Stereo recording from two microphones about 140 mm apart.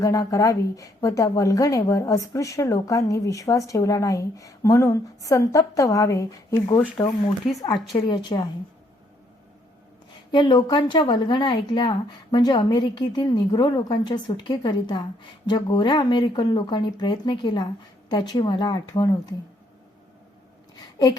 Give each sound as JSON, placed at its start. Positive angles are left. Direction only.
{"t": 0.0, "sound": "a woman's voice", "side_deg": 25}
{"t": 10.3, "sound": "a woman's voice", "side_deg": 35}